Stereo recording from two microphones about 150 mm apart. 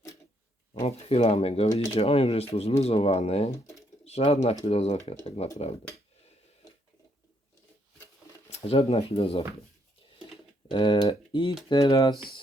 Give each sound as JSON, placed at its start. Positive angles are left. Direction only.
{"t": 0.7, "sound": "speech", "side_deg": 45}
{"t": 8.4, "sound": "speech", "side_deg": 40}
{"t": 10.7, "sound": "speech", "side_deg": 30}
{"t": 11.7, "sound": "speech", "side_deg": 20}